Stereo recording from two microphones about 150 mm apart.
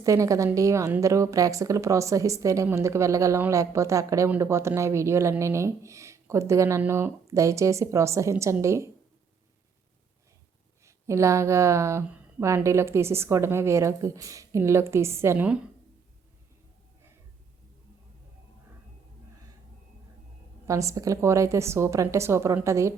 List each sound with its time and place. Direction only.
0.0 s a woman's voice: 20° right (ahead or behind)
10.8 s speech: 20° right (ahead or behind)
20.7 s a woman's voice: 20° right (ahead or behind)